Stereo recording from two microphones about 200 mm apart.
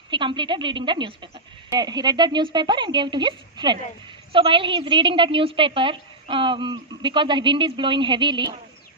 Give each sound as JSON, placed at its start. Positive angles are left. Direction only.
{"t": 0.1, "sound": "a woman's voice", "side_deg": -25}